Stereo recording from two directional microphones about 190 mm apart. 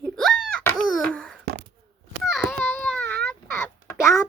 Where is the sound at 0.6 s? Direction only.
10° left (ahead or behind).